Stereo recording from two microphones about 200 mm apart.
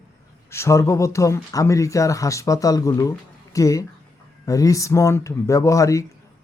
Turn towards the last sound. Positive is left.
turn(degrees=15)  # may be behind; listen again after turning